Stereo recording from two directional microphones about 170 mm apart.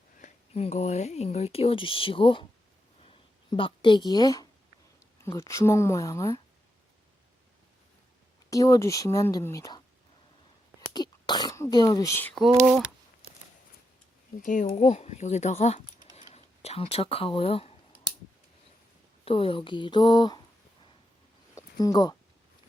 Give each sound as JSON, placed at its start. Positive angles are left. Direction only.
{"t": 0.2, "sound": "speech", "side_deg": 40}
{"t": 3.0, "sound": "a sound", "side_deg": 35}
{"t": 5.2, "sound": "speech", "side_deg": 15}
{"t": 8.4, "sound": "a woman's voice", "side_deg": 20}
{"t": 10.8, "sound": "throat clearing", "side_deg": 25}
{"t": 14.3, "sound": "speech", "side_deg": 50}
{"t": 19.2, "sound": "a woman's voice", "side_deg": 35}
{"t": 21.5, "sound": "a sound", "side_deg": 20}